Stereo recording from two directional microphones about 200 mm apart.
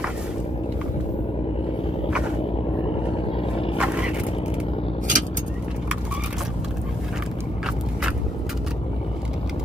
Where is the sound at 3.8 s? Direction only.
5° right (ahead or behind).